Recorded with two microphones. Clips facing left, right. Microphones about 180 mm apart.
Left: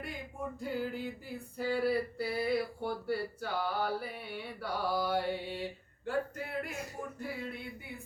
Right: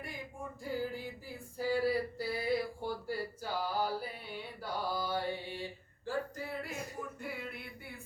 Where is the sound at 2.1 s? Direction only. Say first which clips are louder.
Left 2 dB; 65° left (ahead or behind).